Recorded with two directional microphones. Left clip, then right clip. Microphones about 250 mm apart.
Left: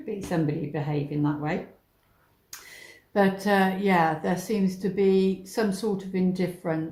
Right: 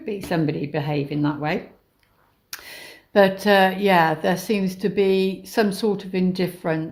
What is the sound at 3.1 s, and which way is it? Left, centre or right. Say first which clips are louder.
Speech: right 7 dB; right.